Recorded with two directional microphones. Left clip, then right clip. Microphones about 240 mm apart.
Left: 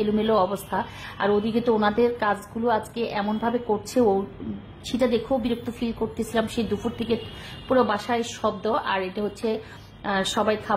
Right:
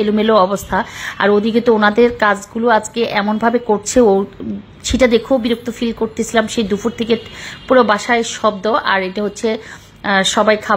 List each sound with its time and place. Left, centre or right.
0.0 s a woman's voice: centre